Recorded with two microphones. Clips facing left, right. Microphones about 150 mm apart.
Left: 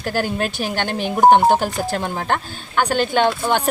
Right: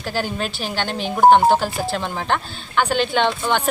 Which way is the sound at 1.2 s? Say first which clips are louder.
Even; 15° left (ahead or behind).